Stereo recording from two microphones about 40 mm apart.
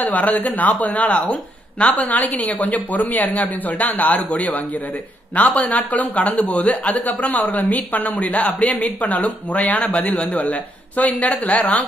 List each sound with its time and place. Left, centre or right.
0.0 s speech: left